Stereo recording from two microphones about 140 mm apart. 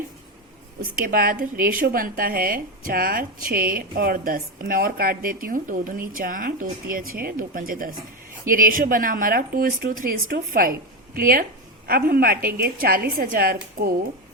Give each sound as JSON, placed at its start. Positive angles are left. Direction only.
{"t": 0.8, "sound": "a woman's voice", "side_deg": -90}